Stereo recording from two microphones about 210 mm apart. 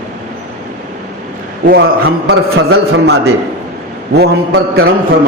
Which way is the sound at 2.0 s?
60° right (ahead or behind).